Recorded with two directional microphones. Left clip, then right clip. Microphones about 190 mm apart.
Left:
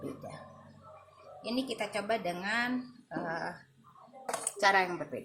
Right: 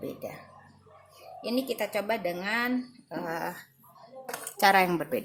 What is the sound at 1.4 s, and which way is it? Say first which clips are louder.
A woman's voice: right 5 dB; 45° right (ahead or behind).